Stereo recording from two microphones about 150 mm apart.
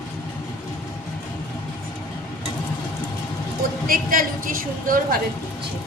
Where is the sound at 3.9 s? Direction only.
70° right (ahead or behind).